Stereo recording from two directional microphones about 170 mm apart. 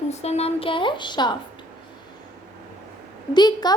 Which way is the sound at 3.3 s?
25° left (ahead or behind).